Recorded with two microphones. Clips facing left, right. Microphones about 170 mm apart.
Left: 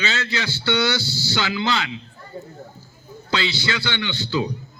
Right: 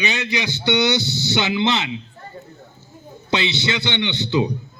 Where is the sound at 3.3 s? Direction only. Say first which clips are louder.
Right 2 dB; 20° right (ahead or behind).